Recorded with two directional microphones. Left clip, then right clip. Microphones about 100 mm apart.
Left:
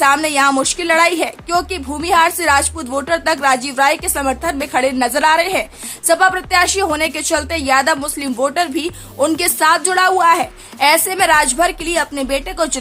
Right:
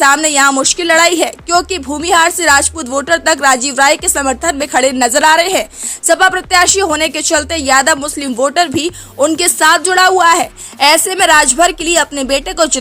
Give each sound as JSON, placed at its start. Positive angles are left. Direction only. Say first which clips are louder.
{"t": 0.0, "sound": "a woman's voice", "louder": "right 3 dB", "side_deg": -40}